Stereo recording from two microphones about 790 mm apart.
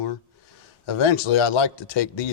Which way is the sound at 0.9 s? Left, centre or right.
Left.